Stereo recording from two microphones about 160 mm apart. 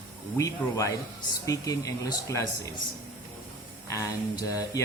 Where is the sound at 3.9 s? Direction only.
20° left (ahead or behind).